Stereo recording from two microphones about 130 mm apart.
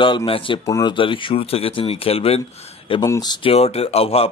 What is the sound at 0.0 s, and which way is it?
Speech, 40° left (ahead or behind).